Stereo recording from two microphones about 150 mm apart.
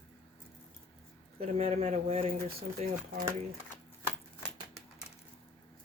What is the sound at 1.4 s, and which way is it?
Speech, 40° right (ahead or behind).